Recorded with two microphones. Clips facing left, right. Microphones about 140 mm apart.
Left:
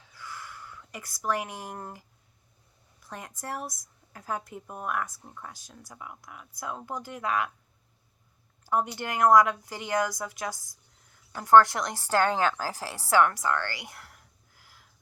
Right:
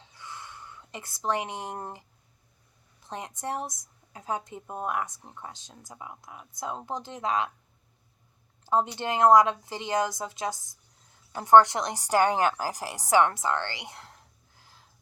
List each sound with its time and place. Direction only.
0.0 s a sound: 20° right (ahead or behind)
3.0 s speech: 20° right (ahead or behind)
8.6 s speech: 20° right (ahead or behind)